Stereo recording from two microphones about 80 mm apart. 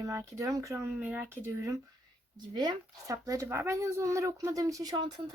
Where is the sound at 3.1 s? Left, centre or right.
Right.